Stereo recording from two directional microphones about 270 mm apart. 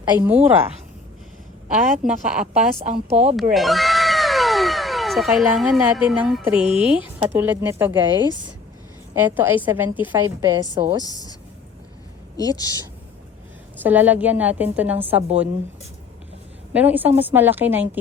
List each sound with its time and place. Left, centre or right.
0.0 s a woman's voice: centre
2.0 s a woman's voice: centre
2.5 s a woman's voice: right
3.5 s speech: centre
6.6 s speech: centre
7.3 s a woman's voice: centre
11.0 s speech: centre
12.4 s speech: centre
13.8 s a woman's voice: centre
16.7 s a woman's voice: centre